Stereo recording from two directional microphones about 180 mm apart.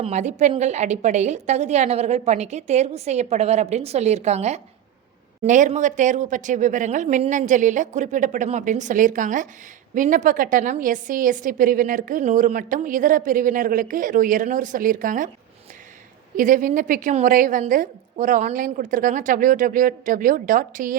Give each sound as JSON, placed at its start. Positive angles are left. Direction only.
{"t": 0.0, "sound": "a woman's voice", "side_deg": -40}
{"t": 16.4, "sound": "a woman's voice", "side_deg": -45}